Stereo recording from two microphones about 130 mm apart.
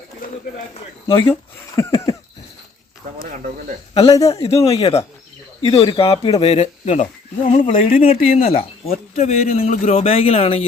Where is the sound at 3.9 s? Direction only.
50° left (ahead or behind).